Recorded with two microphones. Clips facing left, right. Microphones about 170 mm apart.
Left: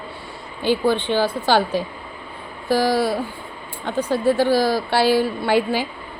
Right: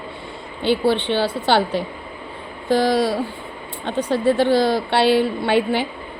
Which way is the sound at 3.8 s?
20° right (ahead or behind).